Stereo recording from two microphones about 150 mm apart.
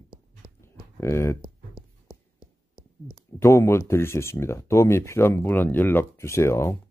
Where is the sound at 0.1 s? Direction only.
20° left (ahead or behind).